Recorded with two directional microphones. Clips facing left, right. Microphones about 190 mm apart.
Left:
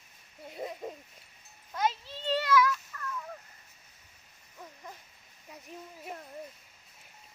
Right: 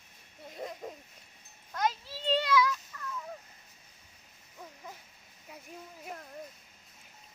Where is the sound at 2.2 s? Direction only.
15° right (ahead or behind).